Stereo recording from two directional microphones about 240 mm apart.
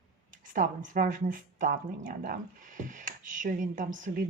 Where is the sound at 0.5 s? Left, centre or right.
Right.